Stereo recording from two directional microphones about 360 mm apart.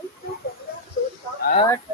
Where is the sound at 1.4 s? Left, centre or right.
Centre.